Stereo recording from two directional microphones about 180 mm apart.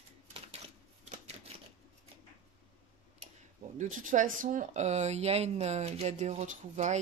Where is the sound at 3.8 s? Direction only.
45° right (ahead or behind).